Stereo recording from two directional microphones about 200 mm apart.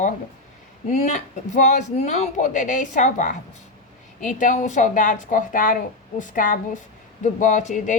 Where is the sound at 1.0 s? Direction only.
35° left (ahead or behind).